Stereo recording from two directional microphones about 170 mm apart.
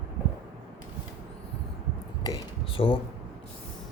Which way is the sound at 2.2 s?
25° left (ahead or behind).